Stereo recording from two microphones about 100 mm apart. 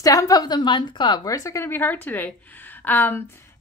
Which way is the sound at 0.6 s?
50° left (ahead or behind).